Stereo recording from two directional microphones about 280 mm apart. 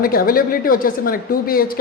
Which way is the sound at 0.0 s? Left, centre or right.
Left.